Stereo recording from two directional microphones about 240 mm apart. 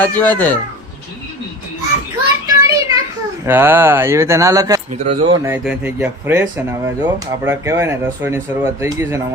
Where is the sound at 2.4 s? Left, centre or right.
Centre.